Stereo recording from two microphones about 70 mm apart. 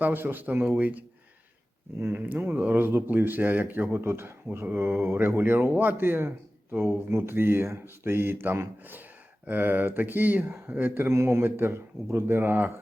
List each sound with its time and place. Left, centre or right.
0.0 s speech: right
2.0 s speech: right
2.2 s speech: right